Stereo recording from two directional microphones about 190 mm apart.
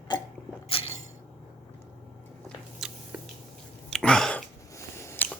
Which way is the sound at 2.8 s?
5° right (ahead or behind).